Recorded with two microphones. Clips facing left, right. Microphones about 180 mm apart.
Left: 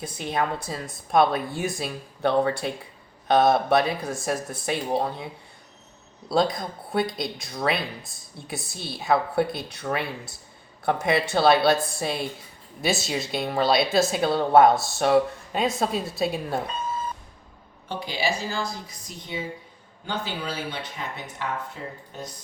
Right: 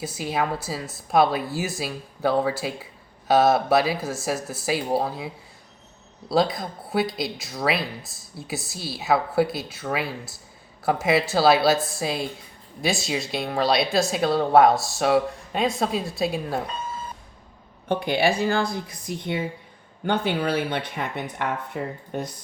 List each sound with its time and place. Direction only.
0.0 s speech: 5° right (ahead or behind)
17.8 s speech: 60° right (ahead or behind)